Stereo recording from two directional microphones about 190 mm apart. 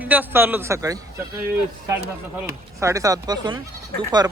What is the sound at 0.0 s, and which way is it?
Speech, 10° right (ahead or behind).